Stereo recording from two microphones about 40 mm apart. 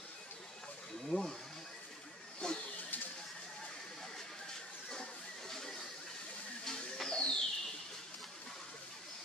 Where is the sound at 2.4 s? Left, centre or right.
Left.